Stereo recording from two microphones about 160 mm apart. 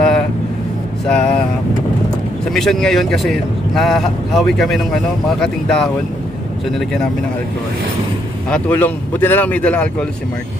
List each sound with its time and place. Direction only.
1.0 s speech: 5° left (ahead or behind)
2.5 s a man's voice: centre (ahead or behind)
8.5 s speech: 10° left (ahead or behind)